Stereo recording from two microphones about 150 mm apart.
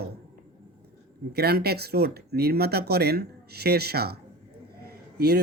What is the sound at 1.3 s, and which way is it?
Speech, 90° right.